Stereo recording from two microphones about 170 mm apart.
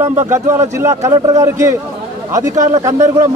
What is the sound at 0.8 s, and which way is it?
Speech, 15° right (ahead or behind).